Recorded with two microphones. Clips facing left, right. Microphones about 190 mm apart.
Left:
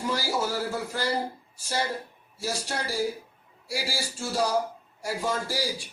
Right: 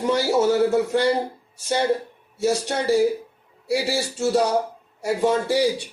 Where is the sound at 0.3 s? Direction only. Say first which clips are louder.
Right 11 dB; 70° right (ahead or behind).